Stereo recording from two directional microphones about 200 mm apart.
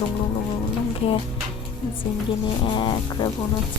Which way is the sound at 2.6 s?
25° left (ahead or behind).